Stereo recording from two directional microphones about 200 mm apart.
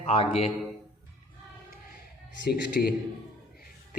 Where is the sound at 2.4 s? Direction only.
50° left (ahead or behind).